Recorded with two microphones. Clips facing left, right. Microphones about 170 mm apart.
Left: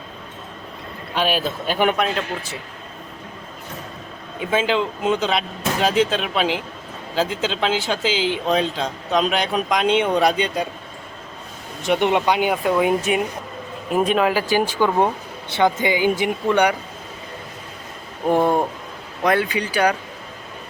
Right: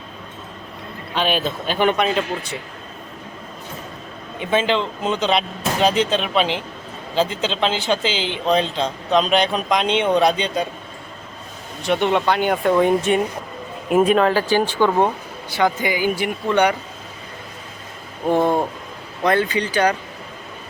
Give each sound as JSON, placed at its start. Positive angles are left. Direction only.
{"t": 1.1, "sound": "speech", "side_deg": 5}
{"t": 4.4, "sound": "speech", "side_deg": 5}
{"t": 11.8, "sound": "speech", "side_deg": 15}
{"t": 14.7, "sound": "speech", "side_deg": 10}
{"t": 15.4, "sound": "speech", "side_deg": 25}
{"t": 18.3, "sound": "speech", "side_deg": 10}